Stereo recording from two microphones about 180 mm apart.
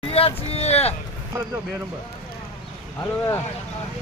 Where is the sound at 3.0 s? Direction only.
15° left (ahead or behind).